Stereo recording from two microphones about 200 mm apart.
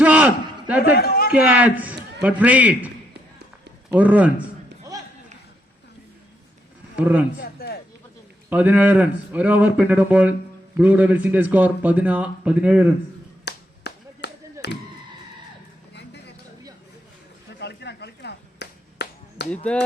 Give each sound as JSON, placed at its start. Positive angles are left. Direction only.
{"t": 0.0, "sound": "a sound", "side_deg": -5}
{"t": 0.8, "sound": "a man's voice", "side_deg": 50}
{"t": 1.3, "sound": "a man's voice", "side_deg": -5}
{"t": 3.9, "sound": "a man's voice", "side_deg": -5}
{"t": 6.9, "sound": "a man's voice", "side_deg": -5}
{"t": 7.3, "sound": "a sound", "side_deg": 50}
{"t": 8.4, "sound": "a man's voice", "side_deg": -10}
{"t": 13.4, "sound": "a sound", "side_deg": 55}
{"t": 14.6, "sound": "speech", "side_deg": 55}
{"t": 16.0, "sound": "vehicle", "side_deg": 55}
{"t": 17.6, "sound": "chop", "side_deg": 55}